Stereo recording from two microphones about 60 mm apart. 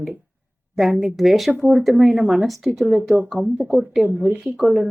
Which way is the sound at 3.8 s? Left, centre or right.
Centre.